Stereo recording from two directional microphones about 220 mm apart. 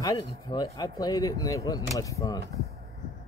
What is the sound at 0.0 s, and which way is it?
Speech, 15° left (ahead or behind).